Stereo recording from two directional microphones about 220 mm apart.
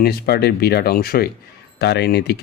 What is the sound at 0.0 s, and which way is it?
A man's voice, 45° left (ahead or behind).